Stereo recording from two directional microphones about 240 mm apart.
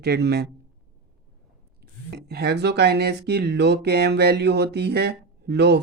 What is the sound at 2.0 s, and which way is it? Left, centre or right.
Speech, right.